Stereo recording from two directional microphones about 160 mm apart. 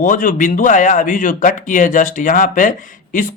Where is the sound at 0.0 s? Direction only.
55° left (ahead or behind).